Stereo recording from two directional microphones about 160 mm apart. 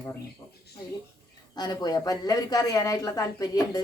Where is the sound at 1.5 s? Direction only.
25° left (ahead or behind).